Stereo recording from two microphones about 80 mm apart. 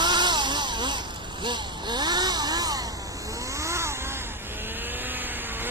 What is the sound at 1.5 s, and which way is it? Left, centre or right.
Vehicle, right.